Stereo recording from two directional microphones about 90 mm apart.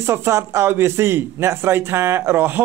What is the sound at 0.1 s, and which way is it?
A man's voice, 30° right (ahead or behind).